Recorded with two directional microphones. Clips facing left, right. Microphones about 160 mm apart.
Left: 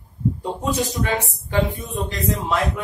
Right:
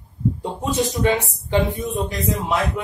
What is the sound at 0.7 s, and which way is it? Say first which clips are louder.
Speech: right 5 dB; 20° right (ahead or behind).